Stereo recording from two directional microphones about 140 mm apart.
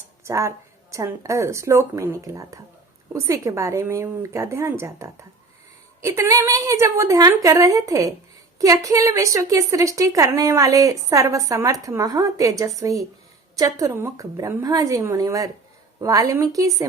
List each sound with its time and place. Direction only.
0.3 s a woman's voice: 20° right (ahead or behind)